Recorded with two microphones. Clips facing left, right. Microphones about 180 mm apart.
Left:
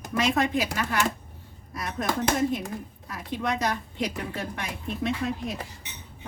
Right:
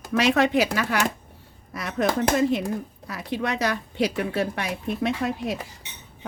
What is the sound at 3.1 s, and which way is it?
A woman's voice, 80° right.